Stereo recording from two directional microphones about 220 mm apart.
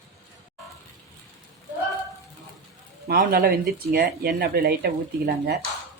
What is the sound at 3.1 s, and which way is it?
Speech, 45° right (ahead or behind).